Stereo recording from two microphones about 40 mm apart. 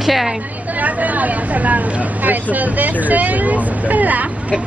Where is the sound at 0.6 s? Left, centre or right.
Right.